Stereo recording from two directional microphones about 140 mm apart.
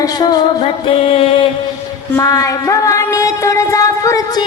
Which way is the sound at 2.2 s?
25° left (ahead or behind).